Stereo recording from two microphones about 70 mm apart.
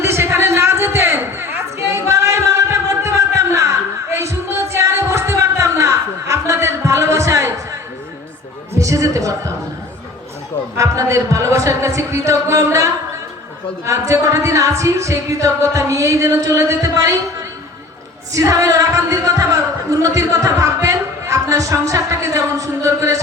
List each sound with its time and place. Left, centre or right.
0.0 s a sound: right
10.8 s speech: right
18.3 s speech: right